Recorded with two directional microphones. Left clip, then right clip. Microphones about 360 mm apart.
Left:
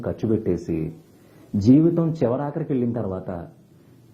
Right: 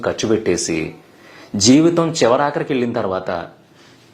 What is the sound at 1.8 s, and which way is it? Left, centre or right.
Speech, centre.